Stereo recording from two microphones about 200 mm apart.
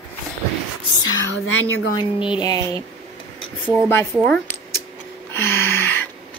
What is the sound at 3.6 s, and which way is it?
Speech, 10° left (ahead or behind).